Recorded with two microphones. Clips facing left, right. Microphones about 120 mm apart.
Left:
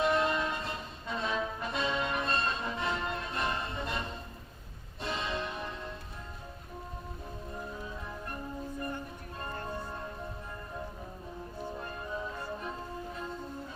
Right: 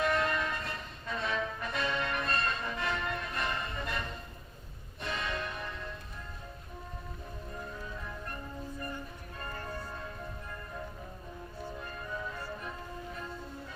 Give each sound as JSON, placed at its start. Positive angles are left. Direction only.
{"t": 0.0, "sound": "music", "side_deg": 25}
{"t": 7.5, "sound": "music", "side_deg": 20}
{"t": 9.4, "sound": "bell", "side_deg": 25}
{"t": 11.8, "sound": "music", "side_deg": 30}